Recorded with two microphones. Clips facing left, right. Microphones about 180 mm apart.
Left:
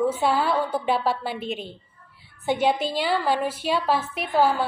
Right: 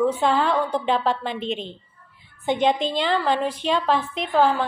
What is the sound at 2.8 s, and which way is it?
A woman's voice, 10° left (ahead or behind).